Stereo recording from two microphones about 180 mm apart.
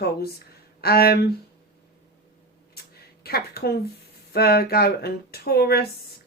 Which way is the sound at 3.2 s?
60° left (ahead or behind).